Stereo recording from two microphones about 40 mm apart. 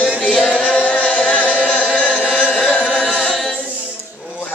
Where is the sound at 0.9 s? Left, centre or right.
Left.